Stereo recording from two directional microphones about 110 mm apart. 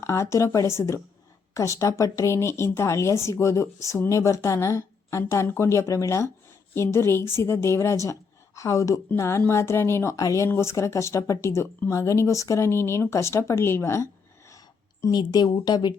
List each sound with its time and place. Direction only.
0.0 s a woman's voice: 25° left (ahead or behind)
15.1 s speech: 40° left (ahead or behind)